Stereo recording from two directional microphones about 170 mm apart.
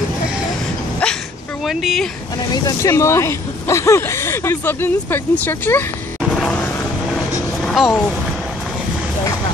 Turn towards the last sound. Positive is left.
turn(degrees=0)  # may be behind; listen again after turning